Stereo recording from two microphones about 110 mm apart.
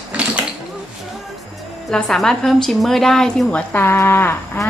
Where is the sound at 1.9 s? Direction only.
5° left (ahead or behind).